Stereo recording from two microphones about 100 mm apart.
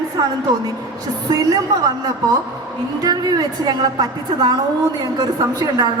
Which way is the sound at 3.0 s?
40° right (ahead or behind).